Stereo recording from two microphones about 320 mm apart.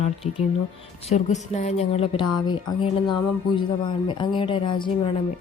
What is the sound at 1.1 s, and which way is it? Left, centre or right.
Speech, left.